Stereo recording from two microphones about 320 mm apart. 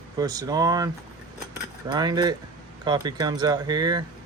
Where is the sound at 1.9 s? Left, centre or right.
Centre.